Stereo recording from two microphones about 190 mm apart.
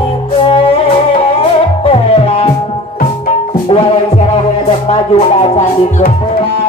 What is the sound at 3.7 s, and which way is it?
Music, 25° left (ahead or behind).